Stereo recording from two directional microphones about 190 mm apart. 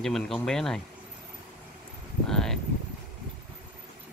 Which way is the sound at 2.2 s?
5° left (ahead or behind).